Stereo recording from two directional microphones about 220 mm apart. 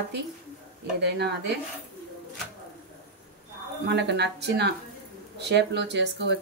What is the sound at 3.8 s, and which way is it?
Speech, 50° right (ahead or behind).